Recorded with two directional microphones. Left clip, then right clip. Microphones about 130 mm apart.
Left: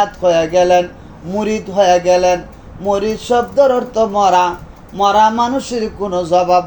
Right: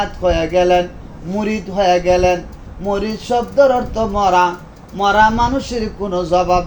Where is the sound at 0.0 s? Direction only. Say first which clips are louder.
Left 4 dB; 25° left (ahead or behind).